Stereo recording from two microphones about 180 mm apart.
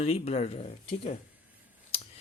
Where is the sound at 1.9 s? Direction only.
35° left (ahead or behind).